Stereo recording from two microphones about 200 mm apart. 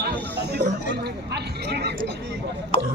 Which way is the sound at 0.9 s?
55° right (ahead or behind).